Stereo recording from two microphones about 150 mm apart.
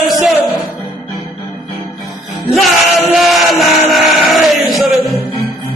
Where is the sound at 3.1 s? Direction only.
Centre (ahead or behind).